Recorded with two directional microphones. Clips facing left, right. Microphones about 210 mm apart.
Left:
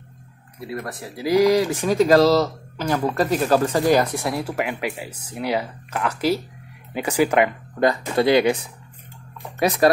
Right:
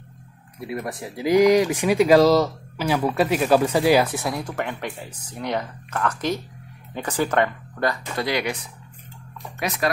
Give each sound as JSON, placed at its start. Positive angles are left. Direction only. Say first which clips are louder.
{"t": 0.7, "sound": "speech", "louder": "right 1 dB", "side_deg": -15}
{"t": 8.2, "sound": "speech", "louder": "left 9 dB", "side_deg": 25}
{"t": 9.6, "sound": "speech", "louder": "left 8 dB", "side_deg": 35}